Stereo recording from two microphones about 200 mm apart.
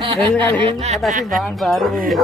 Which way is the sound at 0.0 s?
25° right (ahead or behind).